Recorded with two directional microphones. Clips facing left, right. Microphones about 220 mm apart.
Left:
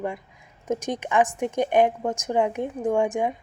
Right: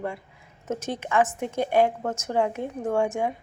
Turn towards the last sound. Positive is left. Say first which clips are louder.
# left 2 dB
turn(degrees=15)  # may be behind; listen again after turning